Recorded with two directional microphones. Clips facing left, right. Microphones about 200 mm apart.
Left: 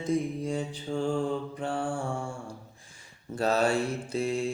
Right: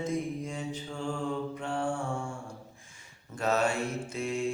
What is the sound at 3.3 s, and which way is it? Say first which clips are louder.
Mantra: left 3 dB; 35° left (ahead or behind).